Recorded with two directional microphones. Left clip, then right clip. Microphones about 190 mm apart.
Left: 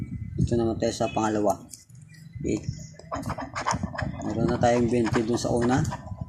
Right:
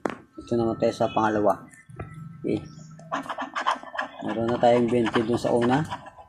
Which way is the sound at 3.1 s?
20° left (ahead or behind).